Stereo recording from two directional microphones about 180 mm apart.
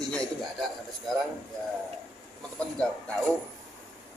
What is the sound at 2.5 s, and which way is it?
Speech, 5° left (ahead or behind).